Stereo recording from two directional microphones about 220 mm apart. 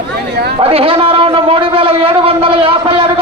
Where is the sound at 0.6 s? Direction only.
25° right (ahead or behind).